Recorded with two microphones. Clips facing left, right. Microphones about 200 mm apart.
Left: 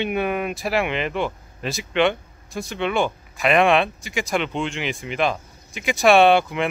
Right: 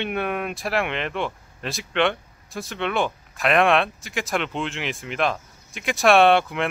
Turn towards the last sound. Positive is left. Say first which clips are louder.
# left 1 dB
turn(degrees=0)  # may be behind; listen again after turning